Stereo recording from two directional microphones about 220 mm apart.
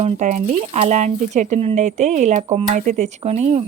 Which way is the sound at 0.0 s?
30° right (ahead or behind).